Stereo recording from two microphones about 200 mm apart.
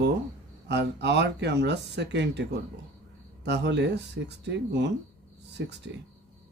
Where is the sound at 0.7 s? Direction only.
60° right (ahead or behind).